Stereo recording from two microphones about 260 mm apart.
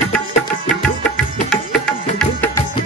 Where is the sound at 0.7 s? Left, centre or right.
Centre.